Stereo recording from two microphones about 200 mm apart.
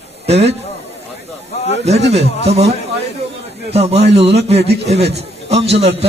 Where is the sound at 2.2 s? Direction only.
55° right (ahead or behind).